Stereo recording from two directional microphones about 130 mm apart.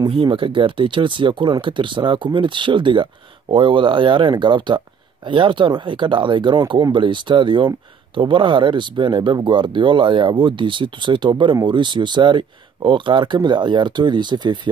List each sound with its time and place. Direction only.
0.2 s speech: 40° right (ahead or behind)